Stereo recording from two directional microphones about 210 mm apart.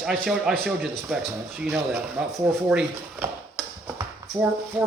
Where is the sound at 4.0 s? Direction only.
5° right (ahead or behind).